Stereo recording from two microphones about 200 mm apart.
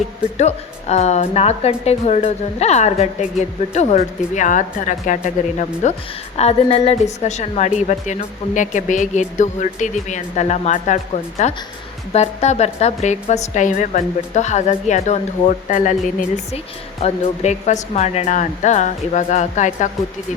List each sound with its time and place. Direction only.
0.3 s a woman's voice: 35° left (ahead or behind)
17.0 s a woman's voice: 35° left (ahead or behind)